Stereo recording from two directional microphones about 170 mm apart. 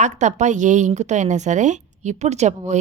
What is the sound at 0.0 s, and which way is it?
A woman's voice, 45° right (ahead or behind).